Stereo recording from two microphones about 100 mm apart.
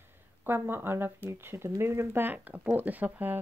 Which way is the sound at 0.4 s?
20° right (ahead or behind).